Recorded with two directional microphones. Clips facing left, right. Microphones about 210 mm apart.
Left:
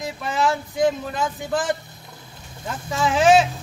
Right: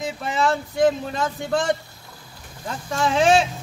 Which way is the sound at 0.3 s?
Centre (ahead or behind).